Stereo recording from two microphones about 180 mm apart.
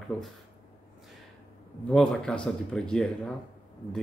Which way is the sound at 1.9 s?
5° left (ahead or behind).